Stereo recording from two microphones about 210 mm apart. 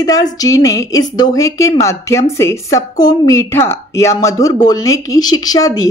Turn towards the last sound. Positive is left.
turn(degrees=15)  # may be behind; listen again after turning